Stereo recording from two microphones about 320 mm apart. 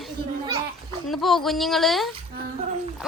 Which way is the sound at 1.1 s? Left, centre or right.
Centre.